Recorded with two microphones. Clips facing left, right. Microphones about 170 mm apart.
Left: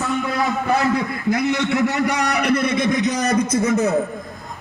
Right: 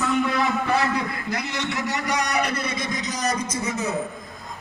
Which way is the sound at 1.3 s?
55° left (ahead or behind).